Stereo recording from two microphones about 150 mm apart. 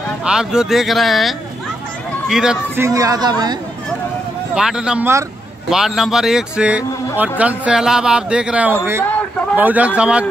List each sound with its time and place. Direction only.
0.2 s a man's voice: 5° right (ahead or behind)
2.7 s speech: 20° right (ahead or behind)
4.6 s a man's voice: 5° right (ahead or behind)